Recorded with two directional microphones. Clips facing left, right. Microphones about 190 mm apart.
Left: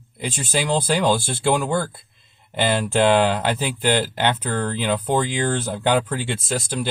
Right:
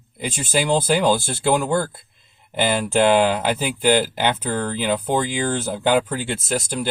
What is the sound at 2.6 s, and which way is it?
Speech, 10° right (ahead or behind).